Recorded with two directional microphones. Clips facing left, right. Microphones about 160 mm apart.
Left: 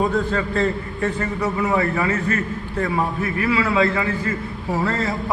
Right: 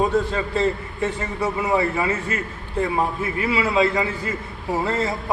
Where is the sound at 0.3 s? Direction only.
15° right (ahead or behind).